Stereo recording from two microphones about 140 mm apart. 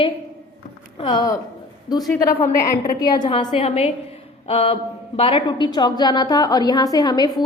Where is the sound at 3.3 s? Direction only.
40° left (ahead or behind).